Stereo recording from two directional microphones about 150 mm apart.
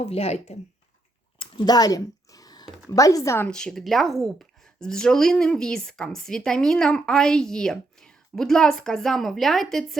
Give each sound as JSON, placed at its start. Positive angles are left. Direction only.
{"t": 0.0, "sound": "speech", "side_deg": 45}
{"t": 1.4, "sound": "a sound", "side_deg": 30}
{"t": 2.9, "sound": "speech", "side_deg": 20}
{"t": 3.5, "sound": "speech", "side_deg": 5}